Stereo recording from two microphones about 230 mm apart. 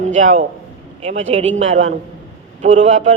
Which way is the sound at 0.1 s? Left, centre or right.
Right.